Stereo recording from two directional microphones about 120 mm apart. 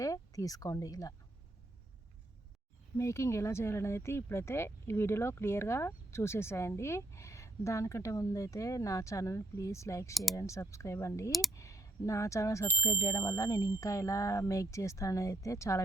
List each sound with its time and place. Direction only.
0.0 s speech: 30° left (ahead or behind)
3.0 s speech: 25° left (ahead or behind)
11.3 s speech: centre (ahead or behind)
11.5 s speech: 25° left (ahead or behind)